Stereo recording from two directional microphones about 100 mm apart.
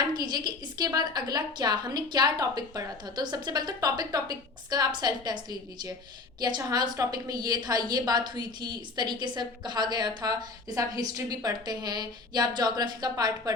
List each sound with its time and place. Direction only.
0.0 s a woman's voice: 45° right (ahead or behind)